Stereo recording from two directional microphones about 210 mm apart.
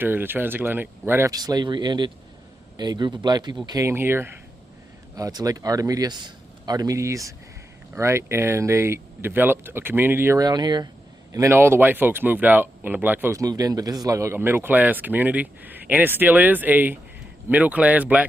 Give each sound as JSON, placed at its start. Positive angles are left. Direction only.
{"t": 0.0, "sound": "speech", "side_deg": -10}